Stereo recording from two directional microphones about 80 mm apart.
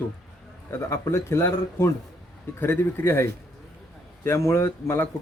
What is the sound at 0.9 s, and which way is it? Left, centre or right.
A man's voice, left.